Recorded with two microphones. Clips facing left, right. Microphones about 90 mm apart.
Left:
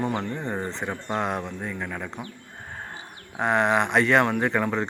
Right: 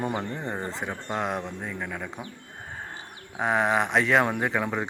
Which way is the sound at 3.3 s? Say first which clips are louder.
Left 2 dB; centre (ahead or behind).